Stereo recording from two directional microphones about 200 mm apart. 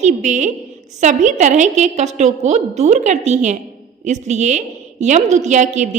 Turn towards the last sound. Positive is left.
turn(degrees=-35)  # may be behind; listen again after turning